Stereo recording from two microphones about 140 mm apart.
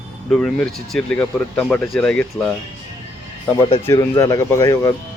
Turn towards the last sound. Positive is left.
turn(degrees=25)  # may be behind; listen again after turning